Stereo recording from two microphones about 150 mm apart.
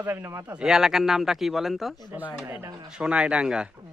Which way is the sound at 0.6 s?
5° right (ahead or behind).